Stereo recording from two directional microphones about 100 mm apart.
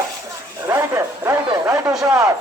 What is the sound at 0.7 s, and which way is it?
Speech, 25° right (ahead or behind).